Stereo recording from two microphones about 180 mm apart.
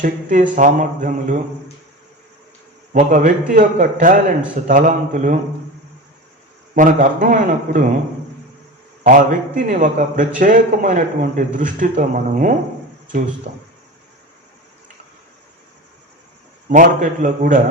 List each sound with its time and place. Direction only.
0.0 s a man's voice: 45° right (ahead or behind)
2.9 s a man's voice: 50° right (ahead or behind)
6.7 s a man's voice: 45° right (ahead or behind)
9.0 s a man's voice: 45° right (ahead or behind)
16.6 s a man's voice: 45° right (ahead or behind)